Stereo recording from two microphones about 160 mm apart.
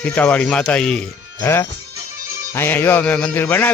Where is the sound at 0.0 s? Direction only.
10° left (ahead or behind).